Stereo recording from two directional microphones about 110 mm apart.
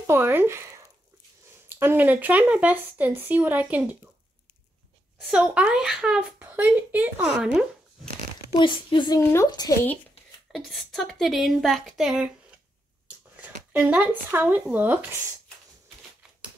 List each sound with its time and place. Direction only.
0.0 s speech: 20° right (ahead or behind)
5.3 s speech: 10° right (ahead or behind)
8.5 s speech: 45° left (ahead or behind)
9.2 s a woman's voice: 25° left (ahead or behind)
9.5 s speech: 35° left (ahead or behind)
10.5 s a woman's voice: centre (ahead or behind); by 15.0 s 15° right (ahead or behind)